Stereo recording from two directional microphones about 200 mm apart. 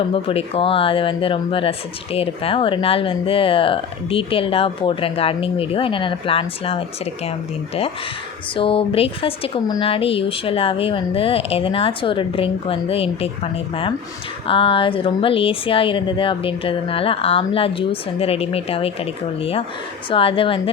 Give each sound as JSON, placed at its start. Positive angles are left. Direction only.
{"t": 0.1, "sound": "speech", "side_deg": 30}
{"t": 8.5, "sound": "speech", "side_deg": 25}